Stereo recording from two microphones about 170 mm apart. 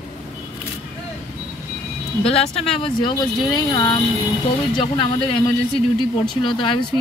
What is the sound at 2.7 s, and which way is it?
A man's voice, 30° left (ahead or behind).